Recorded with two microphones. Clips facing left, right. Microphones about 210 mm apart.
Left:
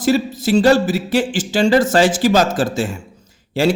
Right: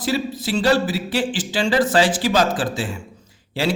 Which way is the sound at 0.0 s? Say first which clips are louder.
Left 6 dB; 45° left (ahead or behind).